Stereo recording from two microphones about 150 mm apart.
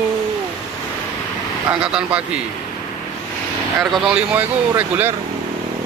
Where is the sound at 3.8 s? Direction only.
5° right (ahead or behind).